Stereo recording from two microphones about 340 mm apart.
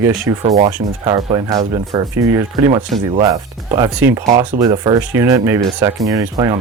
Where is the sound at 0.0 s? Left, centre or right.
Centre.